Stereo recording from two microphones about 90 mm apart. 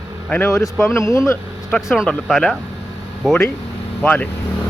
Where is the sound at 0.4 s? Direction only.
30° left (ahead or behind).